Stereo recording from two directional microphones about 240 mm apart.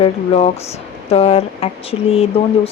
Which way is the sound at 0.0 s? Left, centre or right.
Left.